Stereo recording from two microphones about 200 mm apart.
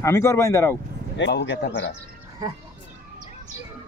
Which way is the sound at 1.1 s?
60° left (ahead or behind).